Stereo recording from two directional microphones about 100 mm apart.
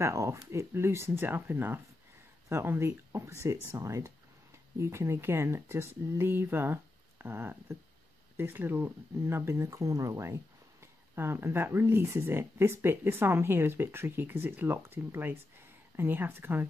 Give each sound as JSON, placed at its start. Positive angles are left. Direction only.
{"t": 0.0, "sound": "speech", "side_deg": -30}